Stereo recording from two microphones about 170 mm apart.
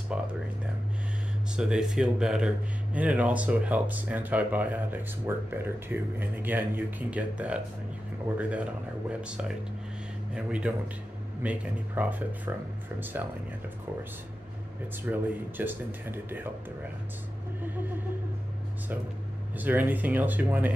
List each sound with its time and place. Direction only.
0.1 s speech: 5° right (ahead or behind)
1.6 s speech: 5° right (ahead or behind)
15.0 s speech: 10° right (ahead or behind)
19.6 s speech: 10° right (ahead or behind)